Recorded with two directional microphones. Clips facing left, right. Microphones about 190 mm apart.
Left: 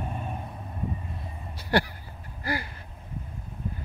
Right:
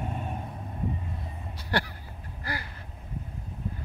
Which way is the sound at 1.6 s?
10° left (ahead or behind).